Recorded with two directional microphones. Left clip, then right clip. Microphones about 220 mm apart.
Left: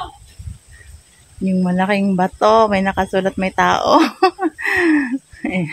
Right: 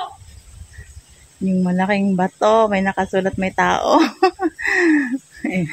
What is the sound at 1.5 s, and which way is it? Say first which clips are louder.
Speech: left 2 dB; 15° left (ahead or behind).